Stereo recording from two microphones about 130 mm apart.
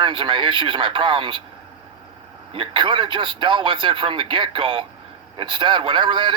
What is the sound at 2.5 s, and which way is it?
Speech, 40° right (ahead or behind).